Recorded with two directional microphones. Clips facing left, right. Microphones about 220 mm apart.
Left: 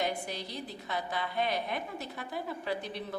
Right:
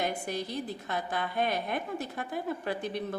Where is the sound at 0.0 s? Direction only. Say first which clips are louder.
Right 2 dB; 50° right (ahead or behind).